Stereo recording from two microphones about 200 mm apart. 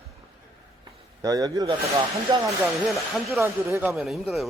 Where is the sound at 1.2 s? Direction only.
20° right (ahead or behind).